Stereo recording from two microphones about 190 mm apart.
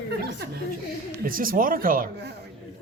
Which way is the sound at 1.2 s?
50° right (ahead or behind).